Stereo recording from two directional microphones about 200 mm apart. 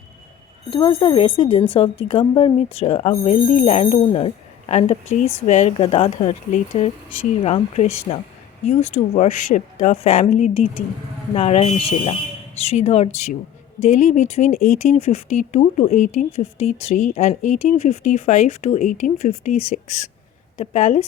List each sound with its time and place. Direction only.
0.7 s speech: 25° left (ahead or behind); by 14.9 s 45° left (ahead or behind)
14.9 s speech: 35° left (ahead or behind)